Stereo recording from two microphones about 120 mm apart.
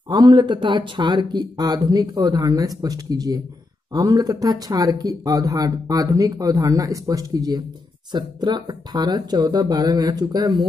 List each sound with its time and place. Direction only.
0.1 s speech: 35° right (ahead or behind)